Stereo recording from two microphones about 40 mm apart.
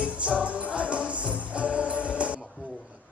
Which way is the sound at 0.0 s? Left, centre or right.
Right.